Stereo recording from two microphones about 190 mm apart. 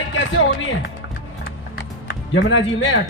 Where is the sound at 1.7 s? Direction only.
75° left (ahead or behind).